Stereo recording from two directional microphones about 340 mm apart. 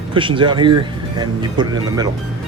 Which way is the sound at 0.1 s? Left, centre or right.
Centre.